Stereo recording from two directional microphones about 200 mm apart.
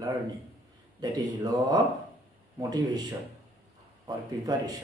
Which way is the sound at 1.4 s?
20° right (ahead or behind).